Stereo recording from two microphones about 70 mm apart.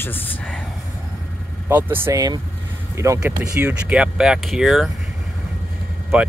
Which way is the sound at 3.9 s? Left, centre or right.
Centre.